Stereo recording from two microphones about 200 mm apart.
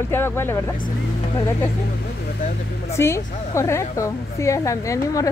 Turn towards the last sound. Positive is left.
turn(degrees=15)  # may be behind; listen again after turning